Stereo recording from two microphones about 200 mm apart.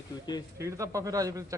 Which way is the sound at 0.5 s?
15° right (ahead or behind).